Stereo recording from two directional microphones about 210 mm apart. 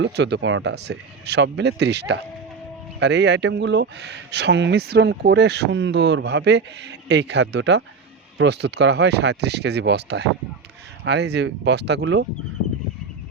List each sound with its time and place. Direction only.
0.0 s speech: 55° right (ahead or behind)